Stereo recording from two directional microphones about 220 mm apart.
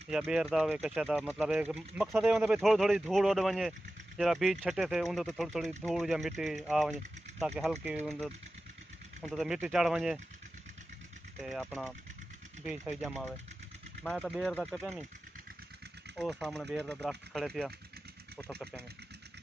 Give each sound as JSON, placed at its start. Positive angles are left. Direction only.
{"t": 0.1, "sound": "speech", "side_deg": -5}
{"t": 11.3, "sound": "speech", "side_deg": 0}
{"t": 16.2, "sound": "speech", "side_deg": 0}